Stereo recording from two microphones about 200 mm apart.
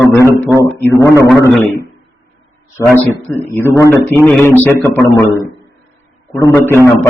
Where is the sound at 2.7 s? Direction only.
15° left (ahead or behind).